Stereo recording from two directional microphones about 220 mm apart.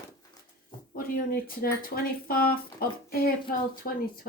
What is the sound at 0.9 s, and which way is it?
A woman's voice, 40° left (ahead or behind).